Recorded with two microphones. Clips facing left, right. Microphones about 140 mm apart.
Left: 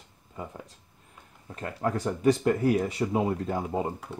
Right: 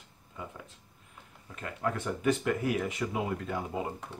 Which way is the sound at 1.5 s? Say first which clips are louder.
Left 4 dB; 35° left (ahead or behind).